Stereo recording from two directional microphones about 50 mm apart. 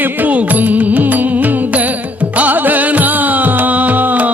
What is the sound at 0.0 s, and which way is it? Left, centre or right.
Music, right.